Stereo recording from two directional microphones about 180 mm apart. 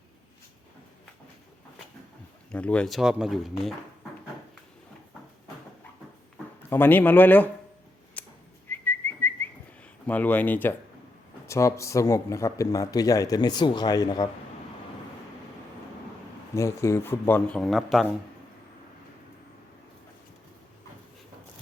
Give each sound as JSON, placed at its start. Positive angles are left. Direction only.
{"t": 2.5, "sound": "speech", "side_deg": 5}
{"t": 6.6, "sound": "speech", "side_deg": 10}
{"t": 8.2, "sound": "whistling", "side_deg": 10}
{"t": 10.1, "sound": "speech", "side_deg": 10}
{"t": 16.6, "sound": "speech", "side_deg": 15}